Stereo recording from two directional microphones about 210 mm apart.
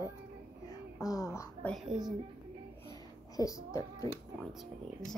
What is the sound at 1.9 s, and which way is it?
Speech, centre (ahead or behind).